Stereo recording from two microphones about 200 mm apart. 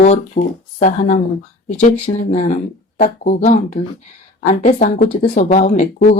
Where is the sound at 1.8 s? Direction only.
35° left (ahead or behind).